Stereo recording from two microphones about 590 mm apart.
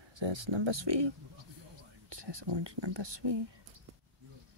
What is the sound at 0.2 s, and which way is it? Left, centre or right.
Speech, right.